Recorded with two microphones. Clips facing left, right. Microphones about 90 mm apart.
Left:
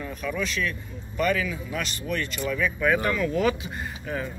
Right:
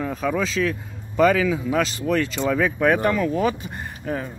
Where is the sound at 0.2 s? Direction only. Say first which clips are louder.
Right 7 dB; 90° right.